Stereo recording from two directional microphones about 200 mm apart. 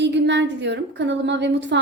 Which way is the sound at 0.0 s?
60° right (ahead or behind).